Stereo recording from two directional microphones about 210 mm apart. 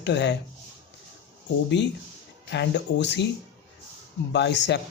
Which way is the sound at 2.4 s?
55° left (ahead or behind).